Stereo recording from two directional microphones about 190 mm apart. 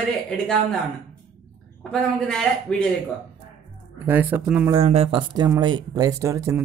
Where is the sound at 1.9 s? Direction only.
5° left (ahead or behind).